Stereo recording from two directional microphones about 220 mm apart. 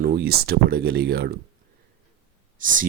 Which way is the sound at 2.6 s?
35° right (ahead or behind).